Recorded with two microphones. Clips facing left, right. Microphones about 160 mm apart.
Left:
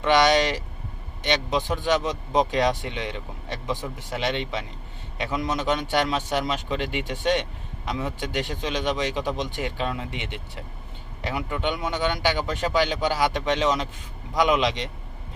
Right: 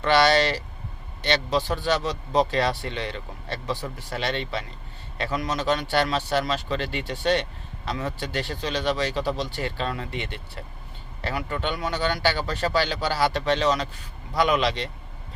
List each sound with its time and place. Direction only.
0.0 s speech: 15° left (ahead or behind)